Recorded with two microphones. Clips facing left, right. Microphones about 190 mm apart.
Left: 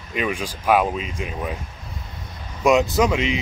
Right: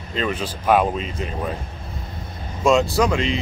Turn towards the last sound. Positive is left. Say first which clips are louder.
# even
turn(degrees=15)  # may be behind; listen again after turning